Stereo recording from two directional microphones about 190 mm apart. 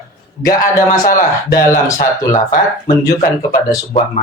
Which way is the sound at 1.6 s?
15° left (ahead or behind).